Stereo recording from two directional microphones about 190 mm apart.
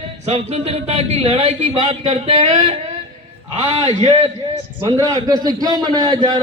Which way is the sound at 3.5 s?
35° right (ahead or behind).